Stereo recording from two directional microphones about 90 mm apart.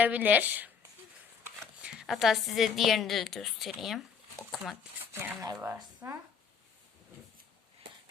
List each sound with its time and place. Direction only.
0.0 s a woman's voice: 20° right (ahead or behind)
1.8 s a woman's voice: 10° right (ahead or behind)
5.1 s speech: 30° right (ahead or behind)